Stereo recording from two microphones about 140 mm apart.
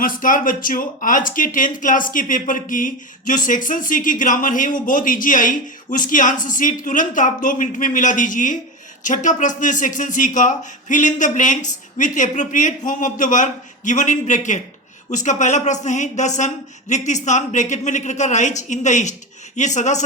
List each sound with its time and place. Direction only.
0.0 s speech: 75° left (ahead or behind); by 20.1 s 60° left (ahead or behind)